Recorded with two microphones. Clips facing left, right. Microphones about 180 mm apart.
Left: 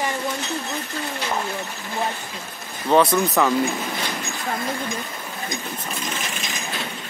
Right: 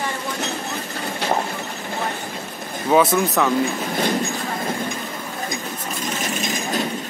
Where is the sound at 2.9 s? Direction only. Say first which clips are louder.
Right 1 dB; 5° right (ahead or behind).